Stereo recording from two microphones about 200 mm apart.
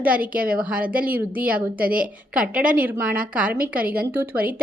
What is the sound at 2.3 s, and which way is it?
A woman's voice, 5° right (ahead or behind).